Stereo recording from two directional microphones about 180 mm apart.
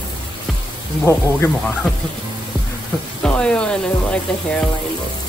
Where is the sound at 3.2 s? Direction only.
5° left (ahead or behind).